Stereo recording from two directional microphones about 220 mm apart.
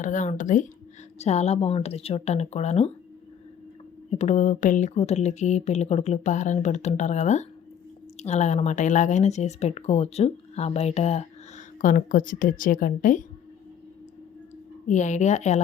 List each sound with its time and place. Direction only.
0.0 s speech: 35° left (ahead or behind)
4.1 s speech: 30° left (ahead or behind)
14.8 s speech: 35° left (ahead or behind)